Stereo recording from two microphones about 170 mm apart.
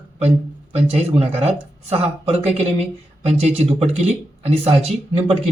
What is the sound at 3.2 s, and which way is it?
Speech, 40° right (ahead or behind).